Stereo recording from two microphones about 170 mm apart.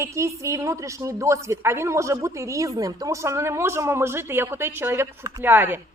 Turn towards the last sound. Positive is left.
turn(degrees=-10)  # may be behind; listen again after turning